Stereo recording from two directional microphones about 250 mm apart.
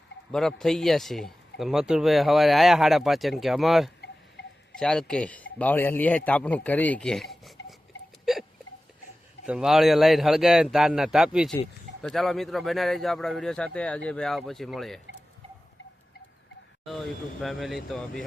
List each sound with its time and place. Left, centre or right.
0.3 s speech: centre
4.4 s wind chime: left
4.7 s speech: centre
8.2 s hiccup: centre
9.5 s speech: centre
16.8 s speech: centre